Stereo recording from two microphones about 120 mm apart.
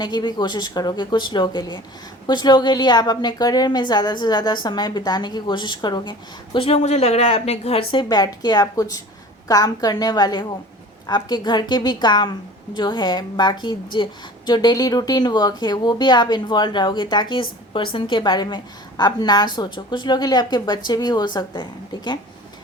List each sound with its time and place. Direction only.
0.0 s a woman's voice: 40° left (ahead or behind)